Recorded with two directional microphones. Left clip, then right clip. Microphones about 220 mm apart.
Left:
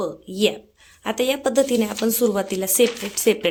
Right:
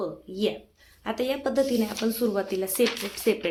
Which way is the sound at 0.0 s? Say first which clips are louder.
Left 7 dB; 40° left (ahead or behind).